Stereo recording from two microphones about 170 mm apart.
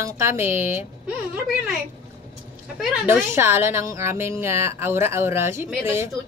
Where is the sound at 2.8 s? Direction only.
5° right (ahead or behind).